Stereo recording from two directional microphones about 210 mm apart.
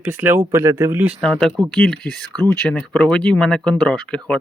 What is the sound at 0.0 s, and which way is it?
Speech, 10° right (ahead or behind).